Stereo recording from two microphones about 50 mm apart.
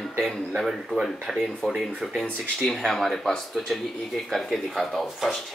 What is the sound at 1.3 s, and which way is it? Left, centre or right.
Speech, centre.